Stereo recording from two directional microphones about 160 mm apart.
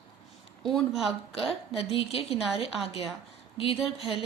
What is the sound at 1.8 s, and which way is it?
Speech, 35° left (ahead or behind).